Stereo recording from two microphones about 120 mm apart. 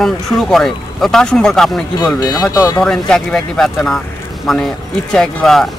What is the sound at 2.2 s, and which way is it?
Speech, 35° left (ahead or behind).